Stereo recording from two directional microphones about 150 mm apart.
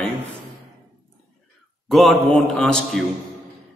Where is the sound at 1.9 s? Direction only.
Centre (ahead or behind).